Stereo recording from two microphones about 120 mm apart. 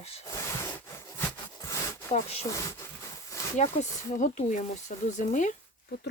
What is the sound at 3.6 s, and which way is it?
Speech, 85° left.